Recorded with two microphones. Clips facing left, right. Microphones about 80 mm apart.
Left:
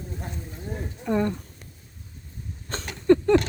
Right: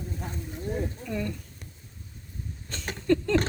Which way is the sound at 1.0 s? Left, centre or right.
Left.